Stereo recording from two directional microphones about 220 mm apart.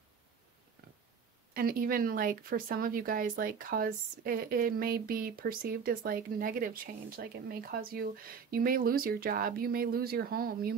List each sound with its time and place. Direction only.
1.5 s speech: 40° right (ahead or behind)